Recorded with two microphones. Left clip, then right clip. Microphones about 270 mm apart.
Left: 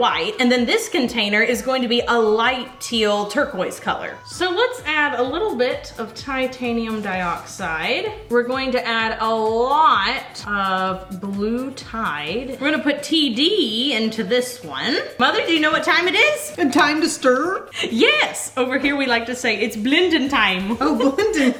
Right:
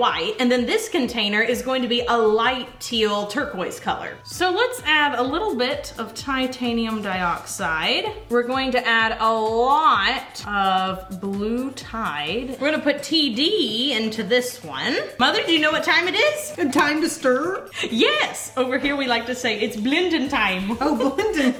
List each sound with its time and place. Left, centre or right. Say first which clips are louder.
0.0 s a woman's voice: left 2 dB; centre
4.4 s a woman's voice: left 1 dB; right
8.3 s speech: left 2 dB; right
12.5 s a woman's voice: left 1 dB; centre
15.2 s speech: left 1 dB; right; by 16.3 s centre
16.6 s a woman's voice: left 4 dB; left
17.7 s a woman's voice: left 3 dB; centre